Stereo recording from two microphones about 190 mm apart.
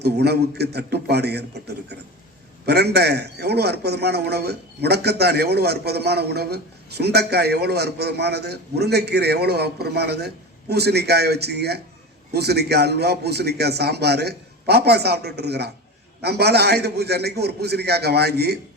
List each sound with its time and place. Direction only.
0.0 s a man's voice: 60° right (ahead or behind)